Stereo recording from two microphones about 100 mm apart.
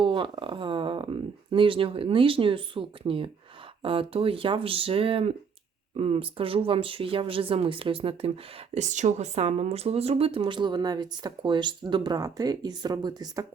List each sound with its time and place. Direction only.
0.0 s speech: 55° right (ahead or behind)
8.7 s speech: 90° right; by 13.4 s 45° right (ahead or behind)